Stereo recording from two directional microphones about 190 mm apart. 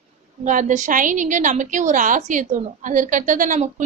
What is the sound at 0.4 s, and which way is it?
A woman's voice, 40° right (ahead or behind).